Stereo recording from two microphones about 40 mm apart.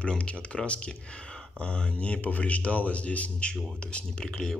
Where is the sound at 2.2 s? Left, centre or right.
Left.